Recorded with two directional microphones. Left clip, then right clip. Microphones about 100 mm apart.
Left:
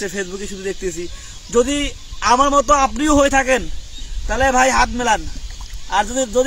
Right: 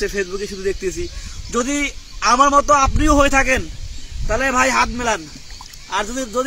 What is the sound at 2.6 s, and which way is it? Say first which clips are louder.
A man's voice: even; 5° left (ahead or behind).